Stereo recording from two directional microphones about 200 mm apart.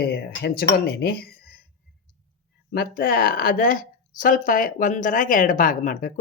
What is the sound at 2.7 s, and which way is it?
Speech, 45° left (ahead or behind).